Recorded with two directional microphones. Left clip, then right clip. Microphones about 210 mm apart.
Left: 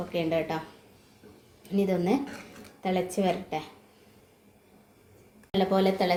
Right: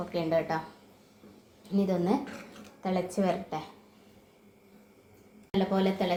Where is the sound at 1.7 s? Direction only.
10° left (ahead or behind).